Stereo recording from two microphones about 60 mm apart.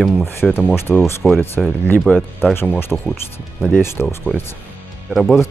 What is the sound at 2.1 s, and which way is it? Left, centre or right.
Speech, left.